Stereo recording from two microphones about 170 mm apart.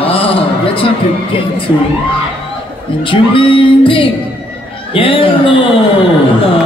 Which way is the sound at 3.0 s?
30° left (ahead or behind).